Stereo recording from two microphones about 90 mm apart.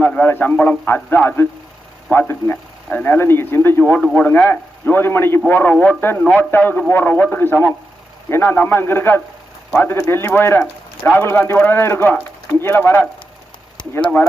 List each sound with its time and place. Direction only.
0.0 s a man's voice: 15° left (ahead or behind)
10.6 s speech: 15° left (ahead or behind)
11.2 s speech: 25° left (ahead or behind)